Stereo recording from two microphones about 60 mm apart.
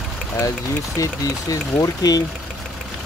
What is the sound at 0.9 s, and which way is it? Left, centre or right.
Speech, left.